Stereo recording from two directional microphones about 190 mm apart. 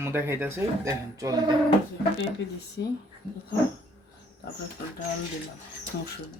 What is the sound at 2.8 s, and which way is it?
Speech, 65° left (ahead or behind).